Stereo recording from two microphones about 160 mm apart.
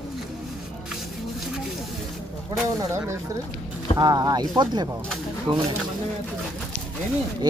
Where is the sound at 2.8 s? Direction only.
20° right (ahead or behind).